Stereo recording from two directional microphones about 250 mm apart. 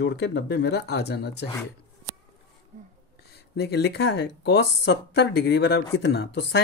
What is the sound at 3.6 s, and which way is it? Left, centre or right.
A woman's voice, left.